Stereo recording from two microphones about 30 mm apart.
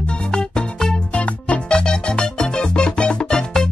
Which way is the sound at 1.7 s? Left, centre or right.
Left.